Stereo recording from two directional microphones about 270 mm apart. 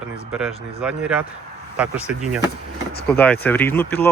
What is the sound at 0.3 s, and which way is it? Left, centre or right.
Speech, centre.